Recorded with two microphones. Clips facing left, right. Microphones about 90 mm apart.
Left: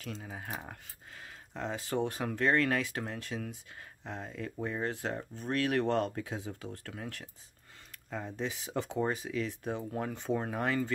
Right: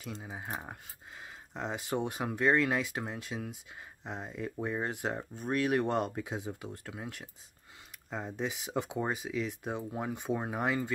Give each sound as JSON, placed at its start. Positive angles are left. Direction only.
{"t": 0.0, "sound": "speech", "side_deg": -15}